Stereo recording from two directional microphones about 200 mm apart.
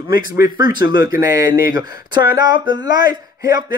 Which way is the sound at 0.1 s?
20° right (ahead or behind).